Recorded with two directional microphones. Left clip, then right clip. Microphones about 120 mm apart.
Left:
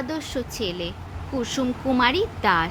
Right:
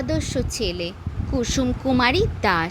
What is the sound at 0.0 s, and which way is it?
Speech, 30° right (ahead or behind).